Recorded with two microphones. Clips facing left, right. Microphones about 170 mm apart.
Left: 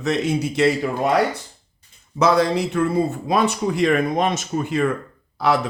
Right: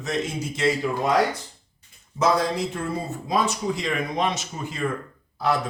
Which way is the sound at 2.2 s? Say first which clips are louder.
Left 5 dB; 70° left (ahead or behind).